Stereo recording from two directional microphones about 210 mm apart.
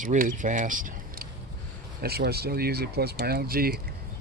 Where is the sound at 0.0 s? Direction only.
40° right (ahead or behind).